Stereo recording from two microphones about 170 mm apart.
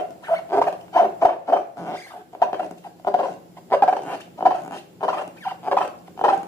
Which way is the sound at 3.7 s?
10° left (ahead or behind).